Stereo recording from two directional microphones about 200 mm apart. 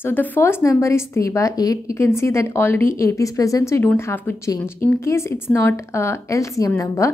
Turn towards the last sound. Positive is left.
turn(degrees=15)  # may be behind; listen again after turning